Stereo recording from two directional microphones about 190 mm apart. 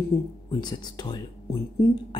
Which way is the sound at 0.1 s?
15° left (ahead or behind).